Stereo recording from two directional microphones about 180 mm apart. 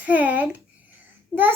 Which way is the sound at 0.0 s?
10° right (ahead or behind).